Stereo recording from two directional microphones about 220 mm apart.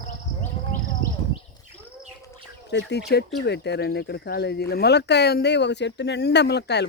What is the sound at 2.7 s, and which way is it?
Speech, 50° left (ahead or behind).